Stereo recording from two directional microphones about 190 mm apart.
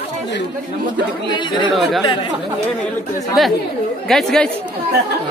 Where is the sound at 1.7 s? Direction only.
Centre (ahead or behind).